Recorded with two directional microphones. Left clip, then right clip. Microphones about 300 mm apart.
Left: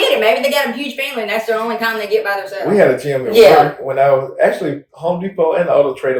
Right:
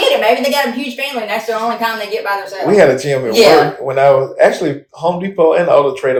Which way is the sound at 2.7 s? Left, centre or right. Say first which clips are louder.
Right 3 dB; right.